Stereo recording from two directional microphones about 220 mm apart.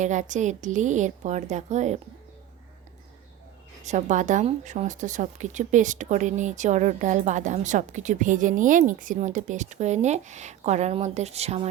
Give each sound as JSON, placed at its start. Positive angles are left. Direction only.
{"t": 0.0, "sound": "a woman's voice", "side_deg": -35}
{"t": 3.8, "sound": "a woman's voice", "side_deg": -35}